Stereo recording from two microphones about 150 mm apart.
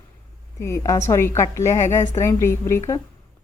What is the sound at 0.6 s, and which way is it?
A woman's voice, 20° left (ahead or behind).